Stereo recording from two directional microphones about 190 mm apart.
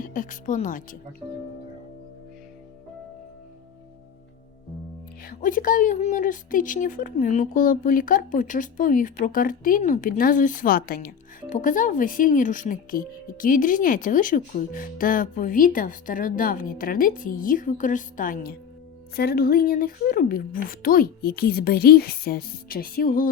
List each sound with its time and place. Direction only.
0.0 s a woman's voice: 45° left (ahead or behind)
5.2 s a woman's voice: 50° left (ahead or behind)